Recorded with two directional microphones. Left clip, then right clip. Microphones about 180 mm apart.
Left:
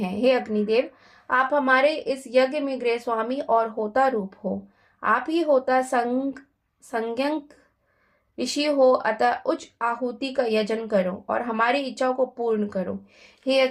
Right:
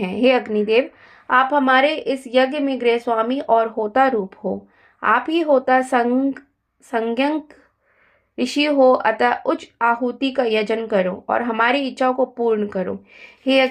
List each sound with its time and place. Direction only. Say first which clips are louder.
0.0 s speech: right 5 dB; 25° right (ahead or behind)